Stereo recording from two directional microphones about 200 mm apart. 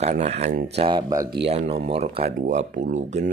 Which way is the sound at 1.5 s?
30° right (ahead or behind).